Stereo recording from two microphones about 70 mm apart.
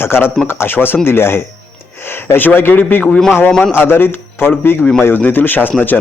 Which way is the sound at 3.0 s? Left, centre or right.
Centre.